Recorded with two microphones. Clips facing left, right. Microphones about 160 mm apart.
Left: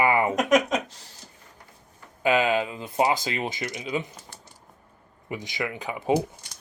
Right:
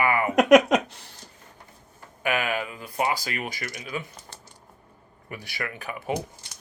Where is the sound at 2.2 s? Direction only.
20° left (ahead or behind).